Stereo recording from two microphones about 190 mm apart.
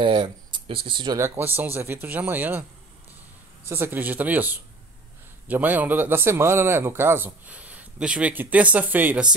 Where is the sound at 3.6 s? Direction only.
10° right (ahead or behind).